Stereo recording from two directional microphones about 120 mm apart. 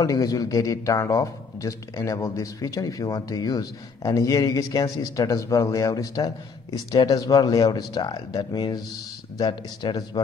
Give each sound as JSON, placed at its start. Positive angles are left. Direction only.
{"t": 0.0, "sound": "speech", "side_deg": 30}